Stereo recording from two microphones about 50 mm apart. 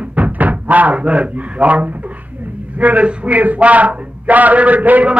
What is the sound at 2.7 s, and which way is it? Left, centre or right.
A man's voice, right.